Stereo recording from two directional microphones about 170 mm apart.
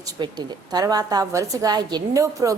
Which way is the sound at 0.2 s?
25° right (ahead or behind).